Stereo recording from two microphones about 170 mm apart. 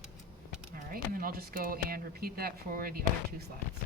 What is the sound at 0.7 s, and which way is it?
Speech, 55° right (ahead or behind).